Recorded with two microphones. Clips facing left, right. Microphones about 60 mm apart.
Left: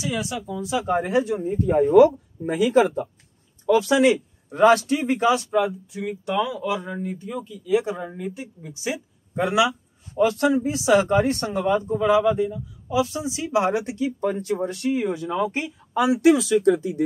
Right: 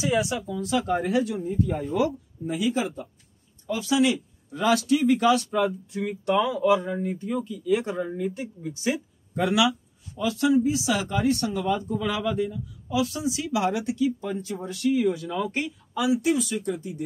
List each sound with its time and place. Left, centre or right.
0.1 s speech: centre
0.5 s speech: centre; by 2.8 s left
2.8 s speech: left
3.9 s speech: left
5.2 s speech: centre
9.4 s speech: left
10.1 s speech: left; by 15.7 s centre
15.9 s speech: left
16.2 s speech: left